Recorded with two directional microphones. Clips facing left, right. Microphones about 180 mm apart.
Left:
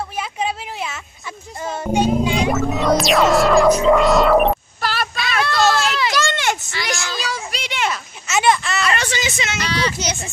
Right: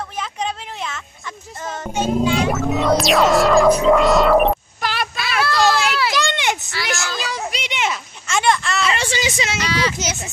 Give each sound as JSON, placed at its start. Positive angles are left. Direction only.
{"t": 0.2, "sound": "a sound", "side_deg": 10}
{"t": 1.7, "sound": "music", "side_deg": 15}
{"t": 2.5, "sound": "music", "side_deg": 0}
{"t": 5.1, "sound": "a sound", "side_deg": -5}
{"t": 6.1, "sound": "a sound", "side_deg": -20}
{"t": 6.7, "sound": "a child's voice", "side_deg": 0}
{"t": 7.2, "sound": "children playing", "side_deg": -20}
{"t": 8.3, "sound": "speech", "side_deg": 5}
{"t": 9.1, "sound": "speech", "side_deg": -30}
{"t": 9.6, "sound": "speech", "side_deg": -10}